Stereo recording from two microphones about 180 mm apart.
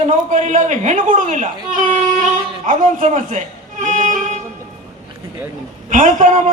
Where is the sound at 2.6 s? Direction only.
45° right (ahead or behind).